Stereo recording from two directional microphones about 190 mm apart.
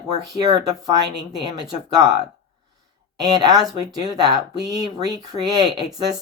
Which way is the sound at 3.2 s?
20° right (ahead or behind).